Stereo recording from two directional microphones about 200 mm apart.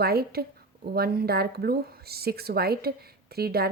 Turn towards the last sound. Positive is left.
turn(degrees=-50)  # may be behind; listen again after turning